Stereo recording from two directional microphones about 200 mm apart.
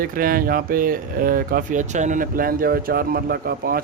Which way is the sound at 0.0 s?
45° right (ahead or behind).